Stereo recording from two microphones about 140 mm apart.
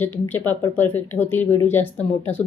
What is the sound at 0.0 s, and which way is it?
Speech, 15° left (ahead or behind).